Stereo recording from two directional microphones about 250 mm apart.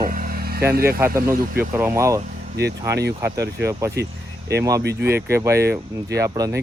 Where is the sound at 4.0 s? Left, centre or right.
Right.